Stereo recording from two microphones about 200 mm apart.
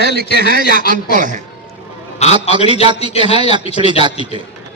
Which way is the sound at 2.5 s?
25° right (ahead or behind).